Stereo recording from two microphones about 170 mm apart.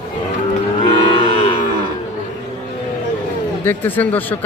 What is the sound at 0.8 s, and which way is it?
Livestock, 30° left (ahead or behind).